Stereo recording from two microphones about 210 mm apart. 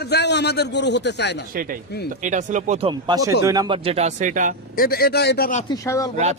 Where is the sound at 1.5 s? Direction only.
40° right (ahead or behind).